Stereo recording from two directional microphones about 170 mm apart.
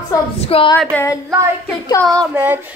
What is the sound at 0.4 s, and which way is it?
Speech, 35° left (ahead or behind).